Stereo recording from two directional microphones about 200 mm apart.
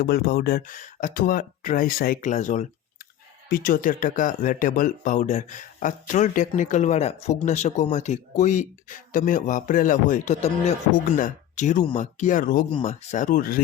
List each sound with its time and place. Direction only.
0.0 s speech: 50° left (ahead or behind)